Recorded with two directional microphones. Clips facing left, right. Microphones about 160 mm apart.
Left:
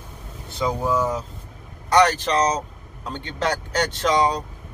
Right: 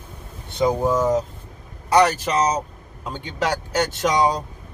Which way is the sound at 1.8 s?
10° right (ahead or behind).